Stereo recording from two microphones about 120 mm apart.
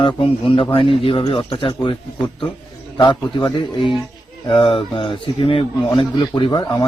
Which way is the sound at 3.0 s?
45° left (ahead or behind).